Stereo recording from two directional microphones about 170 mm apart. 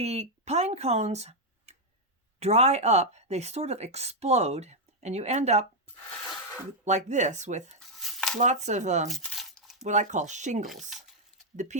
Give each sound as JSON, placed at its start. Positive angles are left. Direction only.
{"t": 0.0, "sound": "speech", "side_deg": -40}
{"t": 6.8, "sound": "speech", "side_deg": -45}
{"t": 7.8, "sound": "a sound", "side_deg": 0}
{"t": 8.4, "sound": "speech", "side_deg": -45}
{"t": 9.0, "sound": "crumpling", "side_deg": 0}
{"t": 9.8, "sound": "speech", "side_deg": -45}